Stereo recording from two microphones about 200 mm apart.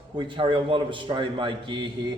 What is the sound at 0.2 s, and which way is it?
A man's voice, 25° right (ahead or behind).